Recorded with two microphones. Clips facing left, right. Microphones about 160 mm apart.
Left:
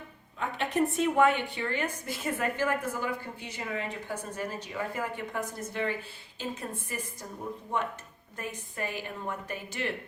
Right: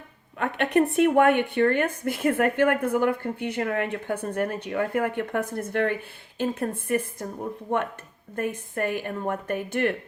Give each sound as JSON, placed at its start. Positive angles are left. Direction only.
{"t": 0.3, "sound": "a woman's voice", "side_deg": -65}
{"t": 8.4, "sound": "a woman's voice", "side_deg": -55}